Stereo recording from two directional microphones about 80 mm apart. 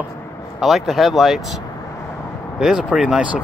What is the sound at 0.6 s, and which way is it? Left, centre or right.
Speech, centre.